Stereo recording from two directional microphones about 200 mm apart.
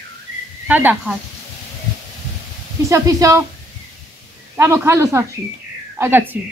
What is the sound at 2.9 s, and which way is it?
Speech, 15° right (ahead or behind).